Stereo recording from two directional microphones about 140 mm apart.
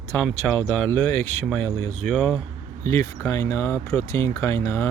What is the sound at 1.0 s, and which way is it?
Speech, 15° left (ahead or behind).